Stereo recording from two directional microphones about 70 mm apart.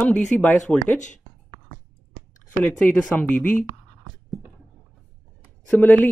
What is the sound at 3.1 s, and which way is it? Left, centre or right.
Speech, left.